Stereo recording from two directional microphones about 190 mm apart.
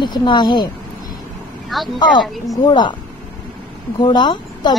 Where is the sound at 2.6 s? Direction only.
25° left (ahead or behind).